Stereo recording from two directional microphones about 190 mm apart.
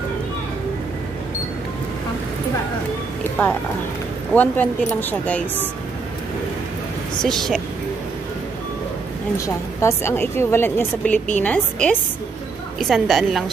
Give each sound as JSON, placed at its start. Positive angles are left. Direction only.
{"t": 3.4, "sound": "a woman's voice", "side_deg": 10}
{"t": 7.2, "sound": "a woman's voice", "side_deg": 0}
{"t": 9.8, "sound": "a woman's voice", "side_deg": 15}